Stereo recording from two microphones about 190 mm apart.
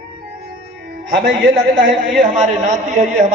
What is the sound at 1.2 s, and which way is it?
A man's voice, 45° right (ahead or behind).